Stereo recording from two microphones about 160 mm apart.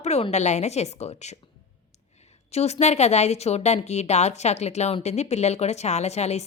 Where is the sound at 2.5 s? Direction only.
40° left (ahead or behind).